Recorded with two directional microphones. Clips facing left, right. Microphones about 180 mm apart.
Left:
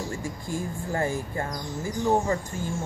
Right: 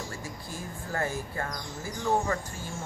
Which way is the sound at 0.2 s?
15° left (ahead or behind).